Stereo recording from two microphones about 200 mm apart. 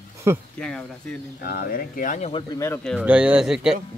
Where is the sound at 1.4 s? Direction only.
45° left (ahead or behind).